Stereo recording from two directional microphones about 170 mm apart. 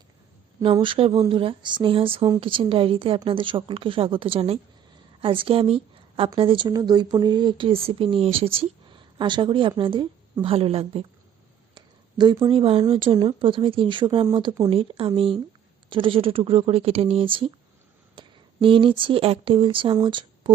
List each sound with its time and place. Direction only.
0.6 s a woman's voice: 30° right (ahead or behind)